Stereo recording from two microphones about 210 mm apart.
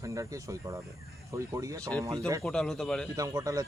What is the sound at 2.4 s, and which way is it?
Speech, 5° left (ahead or behind).